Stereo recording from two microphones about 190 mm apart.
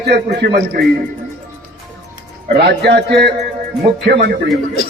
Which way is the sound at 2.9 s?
60° right (ahead or behind).